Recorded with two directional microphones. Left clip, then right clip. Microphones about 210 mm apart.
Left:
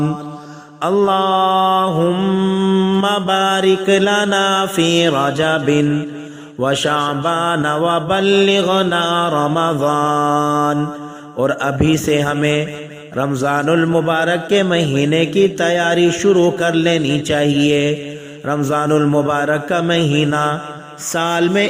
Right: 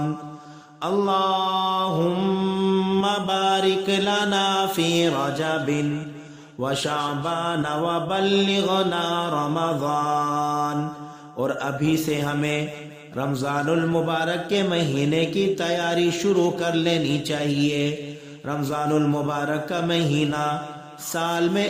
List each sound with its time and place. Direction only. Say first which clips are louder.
0.8 s mantra: left 7 dB; 30° left (ahead or behind); by 3.0 s 10° left (ahead or behind)
3.0 s a man's voice: left 7 dB; 25° left (ahead or behind)